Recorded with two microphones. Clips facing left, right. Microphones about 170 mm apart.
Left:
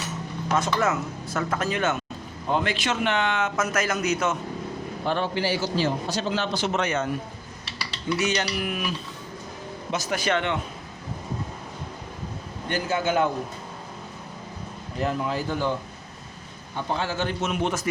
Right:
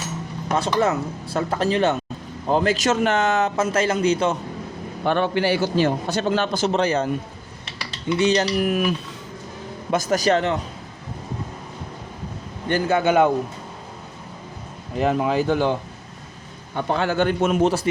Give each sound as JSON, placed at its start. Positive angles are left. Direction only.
{"t": 0.5, "sound": "a man's voice", "side_deg": -35}
{"t": 5.0, "sound": "a man's voice", "side_deg": -60}
{"t": 6.7, "sound": "a man's voice", "side_deg": -35}
{"t": 8.2, "sound": "a man's voice", "side_deg": -35}
{"t": 9.9, "sound": "a man's voice", "side_deg": -45}
{"t": 12.7, "sound": "a man's voice", "side_deg": -60}
{"t": 15.0, "sound": "speech", "side_deg": -70}
{"t": 16.7, "sound": "a man's voice", "side_deg": -60}